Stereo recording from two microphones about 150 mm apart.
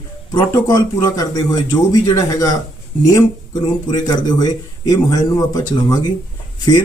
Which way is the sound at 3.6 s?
25° left (ahead or behind).